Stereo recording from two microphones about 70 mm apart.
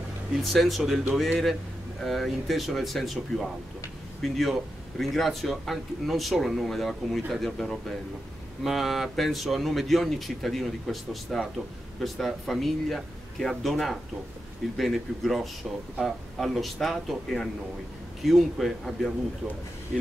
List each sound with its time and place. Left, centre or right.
0.3 s a man's voice: centre